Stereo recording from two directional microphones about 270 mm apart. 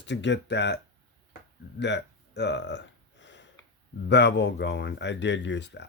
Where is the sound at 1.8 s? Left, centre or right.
Left.